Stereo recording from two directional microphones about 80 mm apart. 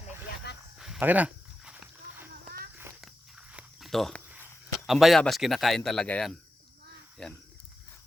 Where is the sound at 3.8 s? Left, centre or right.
Centre.